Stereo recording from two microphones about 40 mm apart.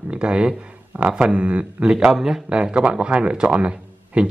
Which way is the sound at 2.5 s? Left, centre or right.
Right.